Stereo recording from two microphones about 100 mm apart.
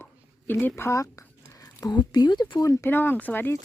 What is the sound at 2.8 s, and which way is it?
Speech, 20° left (ahead or behind).